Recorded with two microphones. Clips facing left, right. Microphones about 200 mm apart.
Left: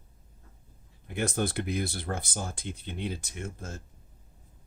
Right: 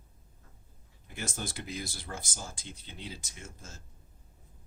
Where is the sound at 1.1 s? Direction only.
60° left (ahead or behind).